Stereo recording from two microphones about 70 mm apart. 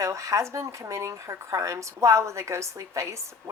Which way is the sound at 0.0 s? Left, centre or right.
Right.